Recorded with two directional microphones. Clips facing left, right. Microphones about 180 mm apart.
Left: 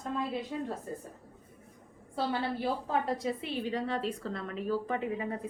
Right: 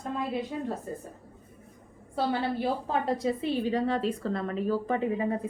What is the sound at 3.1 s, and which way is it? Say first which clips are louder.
A woman's voice: right 5 dB; 35° right (ahead or behind).